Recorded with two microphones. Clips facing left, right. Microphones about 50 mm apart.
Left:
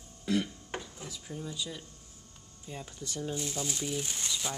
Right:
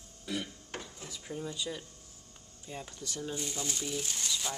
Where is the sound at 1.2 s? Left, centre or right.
Centre.